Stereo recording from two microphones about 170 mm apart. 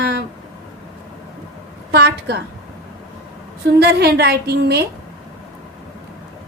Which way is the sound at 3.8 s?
70° right (ahead or behind).